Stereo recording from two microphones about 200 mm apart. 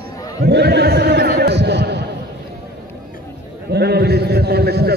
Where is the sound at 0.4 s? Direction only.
55° right (ahead or behind).